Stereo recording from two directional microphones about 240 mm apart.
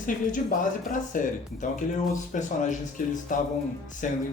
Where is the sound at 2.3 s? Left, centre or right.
Left.